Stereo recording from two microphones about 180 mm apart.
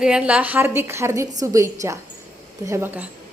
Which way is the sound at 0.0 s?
5° right (ahead or behind).